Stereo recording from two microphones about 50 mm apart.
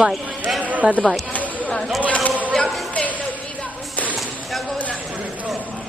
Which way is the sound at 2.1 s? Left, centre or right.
Left.